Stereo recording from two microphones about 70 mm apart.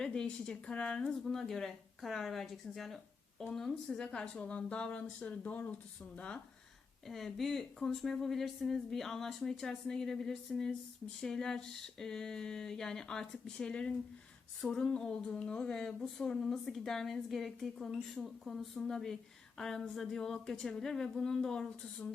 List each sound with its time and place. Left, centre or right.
0.0 s speech: centre
7.1 s speech: centre